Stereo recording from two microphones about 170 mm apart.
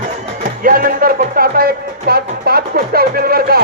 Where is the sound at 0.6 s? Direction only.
55° right (ahead or behind).